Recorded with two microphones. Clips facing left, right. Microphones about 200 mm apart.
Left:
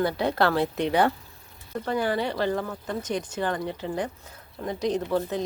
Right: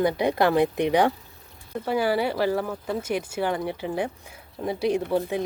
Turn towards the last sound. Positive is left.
turn(degrees=-10)  # may be behind; listen again after turning